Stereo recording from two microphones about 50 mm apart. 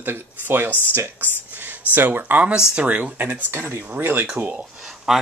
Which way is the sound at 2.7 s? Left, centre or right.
Right.